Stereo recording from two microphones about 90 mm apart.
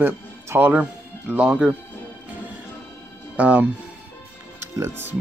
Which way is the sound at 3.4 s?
15° right (ahead or behind).